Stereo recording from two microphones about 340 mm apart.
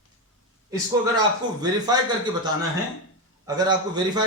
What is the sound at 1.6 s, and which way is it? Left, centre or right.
A man's voice, centre.